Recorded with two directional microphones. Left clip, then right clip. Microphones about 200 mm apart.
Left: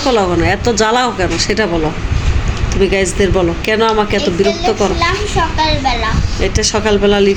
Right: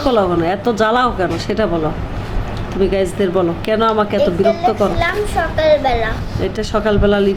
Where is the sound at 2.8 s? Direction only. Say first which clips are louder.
Left 3 dB; 15° right (ahead or behind).